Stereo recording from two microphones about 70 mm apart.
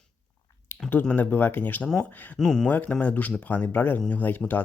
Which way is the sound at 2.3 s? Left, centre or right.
Centre.